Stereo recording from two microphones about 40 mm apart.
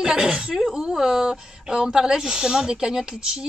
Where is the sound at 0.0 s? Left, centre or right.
Right.